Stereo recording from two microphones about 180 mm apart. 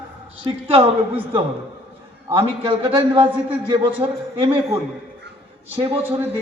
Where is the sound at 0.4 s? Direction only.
30° right (ahead or behind).